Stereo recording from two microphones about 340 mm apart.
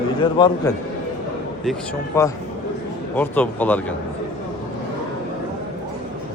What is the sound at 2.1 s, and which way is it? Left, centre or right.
A man's voice, centre.